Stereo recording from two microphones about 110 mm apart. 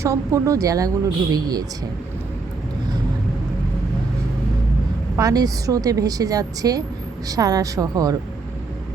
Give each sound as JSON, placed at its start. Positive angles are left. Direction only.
{"t": 0.0, "sound": "a woman's voice", "side_deg": -30}
{"t": 5.1, "sound": "a woman's voice", "side_deg": -35}